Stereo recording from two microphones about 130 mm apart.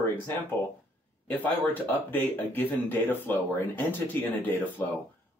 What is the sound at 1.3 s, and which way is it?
Speech, 15° left (ahead or behind).